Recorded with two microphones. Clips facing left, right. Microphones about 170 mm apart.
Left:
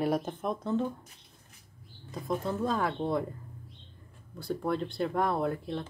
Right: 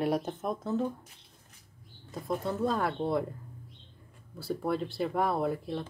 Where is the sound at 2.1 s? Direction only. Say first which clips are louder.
Even; centre (ahead or behind).